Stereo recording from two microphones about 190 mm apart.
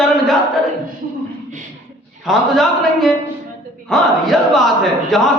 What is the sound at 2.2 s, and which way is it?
A man's voice, centre (ahead or behind).